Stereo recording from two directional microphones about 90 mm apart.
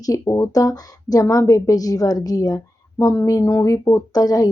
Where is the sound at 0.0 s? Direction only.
35° left (ahead or behind).